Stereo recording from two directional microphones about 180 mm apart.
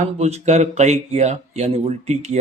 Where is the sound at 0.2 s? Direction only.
40° right (ahead or behind).